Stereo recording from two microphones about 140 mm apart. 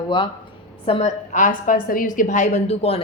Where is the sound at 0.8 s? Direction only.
45° left (ahead or behind).